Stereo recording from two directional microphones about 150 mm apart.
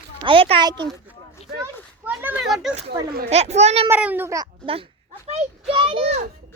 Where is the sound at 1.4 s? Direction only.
40° left (ahead or behind).